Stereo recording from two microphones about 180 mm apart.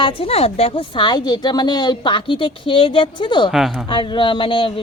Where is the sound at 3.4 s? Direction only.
Centre (ahead or behind).